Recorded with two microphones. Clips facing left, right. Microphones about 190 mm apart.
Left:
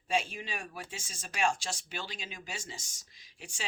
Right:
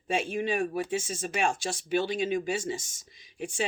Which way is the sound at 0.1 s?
55° right (ahead or behind).